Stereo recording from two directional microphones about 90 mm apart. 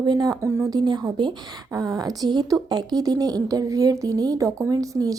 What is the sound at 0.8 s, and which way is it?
Speech, 50° right (ahead or behind).